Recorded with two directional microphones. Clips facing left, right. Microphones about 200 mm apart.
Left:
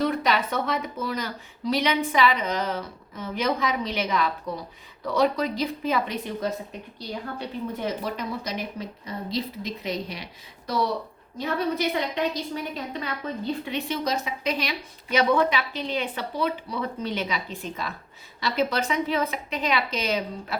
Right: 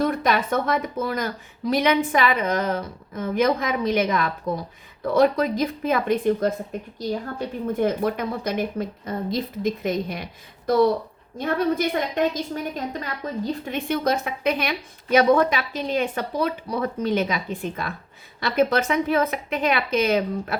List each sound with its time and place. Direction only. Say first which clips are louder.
0.0 s a woman's voice: right 2 dB; 50° right (ahead or behind)